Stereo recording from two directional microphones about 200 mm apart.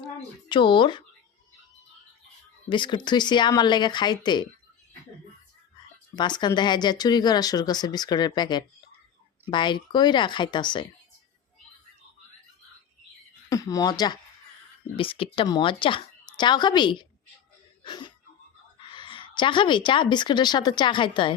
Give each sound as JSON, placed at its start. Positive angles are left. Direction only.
{"t": 0.4, "sound": "speech", "side_deg": 25}
{"t": 2.6, "sound": "speech", "side_deg": 25}
{"t": 6.1, "sound": "speech", "side_deg": 20}
{"t": 13.5, "sound": "a woman's voice", "side_deg": 15}